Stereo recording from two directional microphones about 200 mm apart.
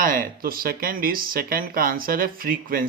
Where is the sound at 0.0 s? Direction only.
45° right (ahead or behind).